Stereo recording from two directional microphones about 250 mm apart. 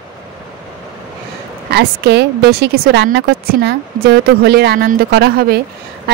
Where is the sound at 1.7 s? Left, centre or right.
Right.